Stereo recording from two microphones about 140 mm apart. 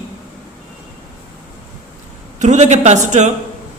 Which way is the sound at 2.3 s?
55° right (ahead or behind).